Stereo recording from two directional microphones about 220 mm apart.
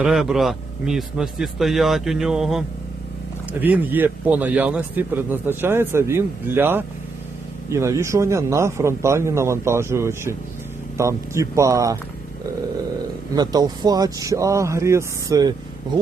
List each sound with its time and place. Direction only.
0.0 s a man's voice: centre (ahead or behind)
13.3 s a man's voice: 20° right (ahead or behind)